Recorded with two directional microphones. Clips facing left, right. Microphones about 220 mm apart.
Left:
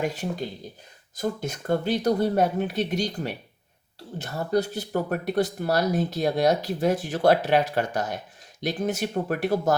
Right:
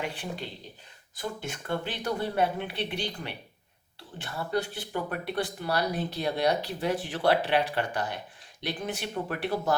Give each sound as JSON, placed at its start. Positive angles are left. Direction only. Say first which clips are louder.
{"t": 0.0, "sound": "speech", "louder": "left 7 dB", "side_deg": 40}